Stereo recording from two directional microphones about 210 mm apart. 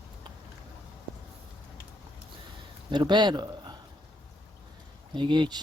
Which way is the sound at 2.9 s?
20° right (ahead or behind).